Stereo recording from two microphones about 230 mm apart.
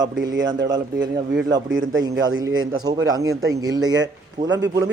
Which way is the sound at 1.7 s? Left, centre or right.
Right.